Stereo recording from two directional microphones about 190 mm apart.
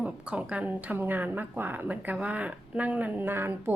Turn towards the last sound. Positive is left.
turn(degrees=-10)  # may be behind; listen again after turning